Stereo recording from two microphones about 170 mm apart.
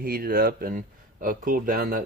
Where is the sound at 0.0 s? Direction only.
60° right (ahead or behind).